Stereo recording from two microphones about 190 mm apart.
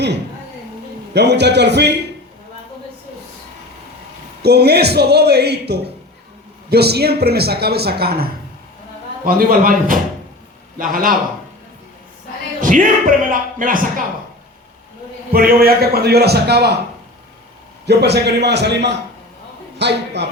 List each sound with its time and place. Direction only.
1.1 s speech: 60° right (ahead or behind)
4.4 s speech: 60° right (ahead or behind)
12.6 s speech: 45° right (ahead or behind)
15.3 s speech: 50° right (ahead or behind)
17.8 s speech: 60° right (ahead or behind)